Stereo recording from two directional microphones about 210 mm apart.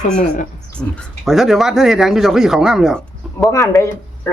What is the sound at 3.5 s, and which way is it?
Speech, 15° left (ahead or behind).